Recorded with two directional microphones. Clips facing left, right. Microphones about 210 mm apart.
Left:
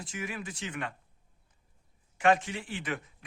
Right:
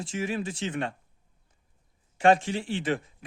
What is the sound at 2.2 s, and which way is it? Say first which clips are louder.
Speech: right 4 dB; 30° right (ahead or behind).